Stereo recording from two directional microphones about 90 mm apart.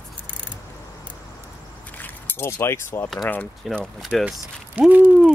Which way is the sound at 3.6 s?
5° left (ahead or behind).